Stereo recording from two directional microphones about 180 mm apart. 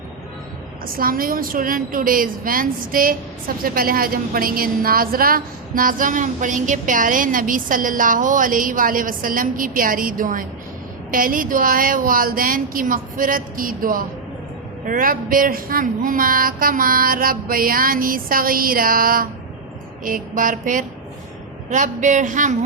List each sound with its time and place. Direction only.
0.9 s a woman's voice: 50° right (ahead or behind)